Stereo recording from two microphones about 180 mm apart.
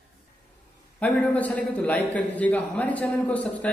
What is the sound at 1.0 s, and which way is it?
A man's voice, 10° left (ahead or behind).